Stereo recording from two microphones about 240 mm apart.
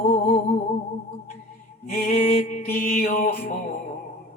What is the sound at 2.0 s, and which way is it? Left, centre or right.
Music, left.